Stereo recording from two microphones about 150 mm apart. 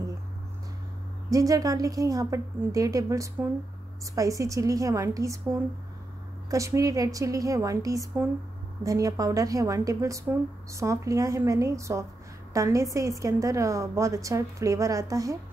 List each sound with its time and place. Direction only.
1.3 s a woman's voice: 20° right (ahead or behind)
6.5 s a woman's voice: 20° right (ahead or behind)